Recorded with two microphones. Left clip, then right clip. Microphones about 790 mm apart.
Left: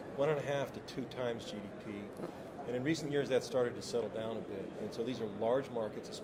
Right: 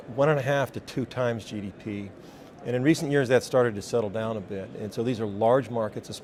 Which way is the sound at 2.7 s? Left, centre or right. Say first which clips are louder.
Right 12 dB; right.